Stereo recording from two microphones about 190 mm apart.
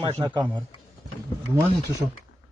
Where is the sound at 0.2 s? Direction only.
15° right (ahead or behind).